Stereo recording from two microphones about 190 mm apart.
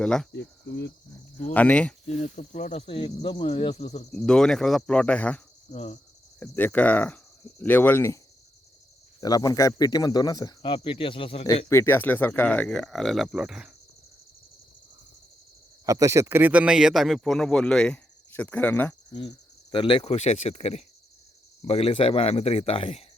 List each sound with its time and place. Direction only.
0.0 s speech: 5° left (ahead or behind)
0.3 s speech: 65° left (ahead or behind)
1.5 s speech: 5° left (ahead or behind)
2.0 s speech: 40° left (ahead or behind)
4.1 s speech: 5° left (ahead or behind)
5.7 s speech: 30° left (ahead or behind)
6.4 s speech: 10° left (ahead or behind)
9.2 s speech: 20° left (ahead or behind)
11.7 s speech: 10° left (ahead or behind); by 13.7 s 5° right (ahead or behind)
15.9 s speech: 15° right (ahead or behind); by 18.9 s 10° left (ahead or behind)
19.7 s speech: 25° left (ahead or behind)